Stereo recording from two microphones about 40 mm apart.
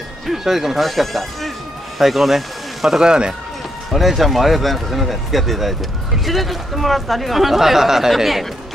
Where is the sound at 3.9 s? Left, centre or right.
Centre.